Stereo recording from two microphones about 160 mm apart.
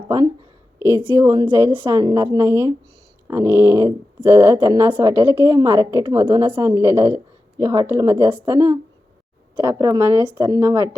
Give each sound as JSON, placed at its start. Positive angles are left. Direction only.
{"t": 1.0, "sound": "speech", "side_deg": -15}